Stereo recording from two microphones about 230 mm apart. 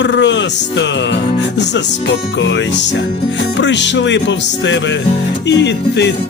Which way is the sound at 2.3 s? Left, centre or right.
Left.